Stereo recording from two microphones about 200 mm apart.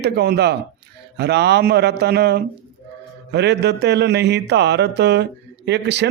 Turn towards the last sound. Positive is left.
turn(degrees=-60)  # may be behind; listen again after turning